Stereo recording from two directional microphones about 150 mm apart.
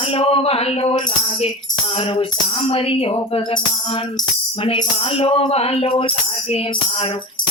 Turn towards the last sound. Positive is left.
turn(degrees=35)  # may be behind; listen again after turning